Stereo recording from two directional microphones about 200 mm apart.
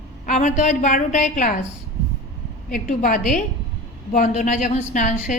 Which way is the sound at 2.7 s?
45° left (ahead or behind).